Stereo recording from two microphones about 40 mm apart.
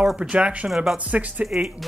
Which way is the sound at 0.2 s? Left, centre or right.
Right.